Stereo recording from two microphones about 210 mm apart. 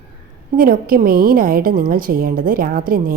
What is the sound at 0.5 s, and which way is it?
A woman's voice, 40° right (ahead or behind).